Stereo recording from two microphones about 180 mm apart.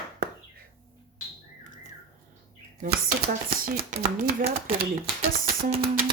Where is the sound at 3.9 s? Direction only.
45° right (ahead or behind).